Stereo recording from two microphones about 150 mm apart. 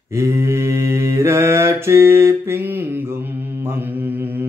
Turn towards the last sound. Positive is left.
turn(degrees=-10)  # may be behind; listen again after turning